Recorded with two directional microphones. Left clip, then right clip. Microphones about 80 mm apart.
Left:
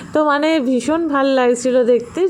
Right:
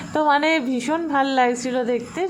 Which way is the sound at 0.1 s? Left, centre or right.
Left.